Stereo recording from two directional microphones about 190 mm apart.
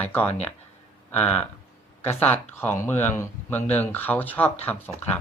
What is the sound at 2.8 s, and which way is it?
Speech, 10° left (ahead or behind).